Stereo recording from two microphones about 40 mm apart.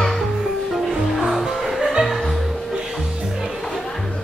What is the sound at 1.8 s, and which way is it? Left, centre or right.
Music, centre.